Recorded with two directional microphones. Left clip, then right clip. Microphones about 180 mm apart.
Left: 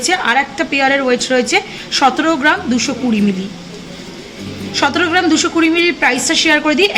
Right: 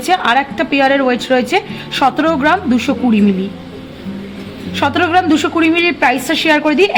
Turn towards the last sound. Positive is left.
turn(degrees=-55)  # may be behind; listen again after turning